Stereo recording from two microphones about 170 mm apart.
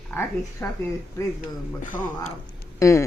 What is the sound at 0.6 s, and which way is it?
Speech, 10° left (ahead or behind).